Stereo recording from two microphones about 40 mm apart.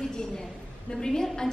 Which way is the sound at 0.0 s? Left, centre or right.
Centre.